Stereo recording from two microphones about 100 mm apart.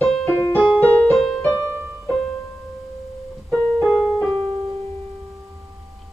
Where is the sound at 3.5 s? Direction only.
5° left (ahead or behind).